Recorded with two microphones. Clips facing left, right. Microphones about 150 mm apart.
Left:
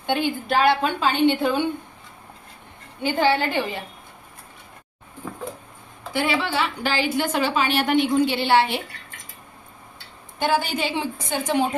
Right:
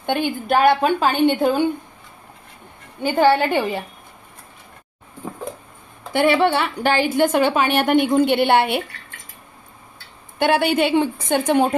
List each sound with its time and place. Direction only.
0.0 s a woman's voice: 50° right (ahead or behind)
3.2 s a woman's voice: 50° right (ahead or behind)
6.1 s a woman's voice: 60° right (ahead or behind)
10.4 s a woman's voice: 65° right (ahead or behind)